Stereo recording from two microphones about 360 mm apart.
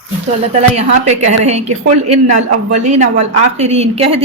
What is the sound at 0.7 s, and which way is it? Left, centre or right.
A woman's voice, centre.